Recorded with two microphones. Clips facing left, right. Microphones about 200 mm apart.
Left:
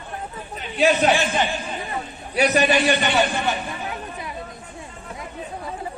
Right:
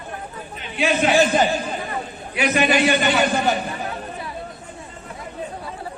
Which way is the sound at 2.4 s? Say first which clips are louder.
Left 1 dB; 40° left (ahead or behind).